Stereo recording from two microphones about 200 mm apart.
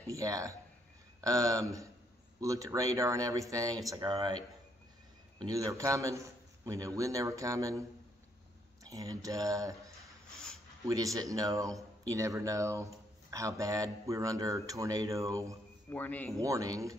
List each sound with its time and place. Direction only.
0.0 s speech: 15° right (ahead or behind)
5.4 s speech: 15° right (ahead or behind)
8.8 s speech: 15° right (ahead or behind)
10.9 s speech: 15° right (ahead or behind)
15.9 s speech: 10° left (ahead or behind)
16.3 s speech: 15° right (ahead or behind)